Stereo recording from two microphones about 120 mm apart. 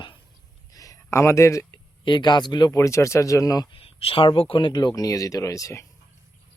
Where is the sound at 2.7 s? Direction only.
25° left (ahead or behind).